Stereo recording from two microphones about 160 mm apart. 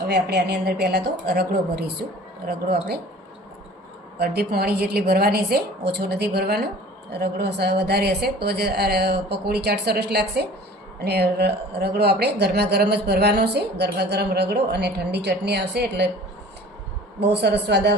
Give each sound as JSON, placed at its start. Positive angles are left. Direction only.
{"t": 0.0, "sound": "a woman's voice", "side_deg": -90}
{"t": 4.2, "sound": "a woman's voice", "side_deg": -80}
{"t": 17.4, "sound": "speech", "side_deg": -90}